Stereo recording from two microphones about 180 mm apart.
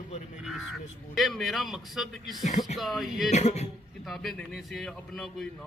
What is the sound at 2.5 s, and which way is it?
Speech, 40° left (ahead or behind).